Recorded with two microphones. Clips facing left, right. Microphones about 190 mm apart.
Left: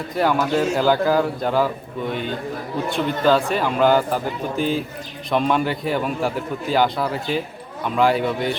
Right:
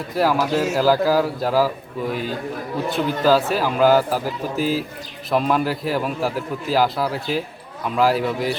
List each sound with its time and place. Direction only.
0.1 s a man's voice: 5° right (ahead or behind)